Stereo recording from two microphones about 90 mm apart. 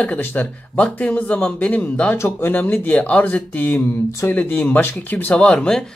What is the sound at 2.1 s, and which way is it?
Speech, 25° left (ahead or behind).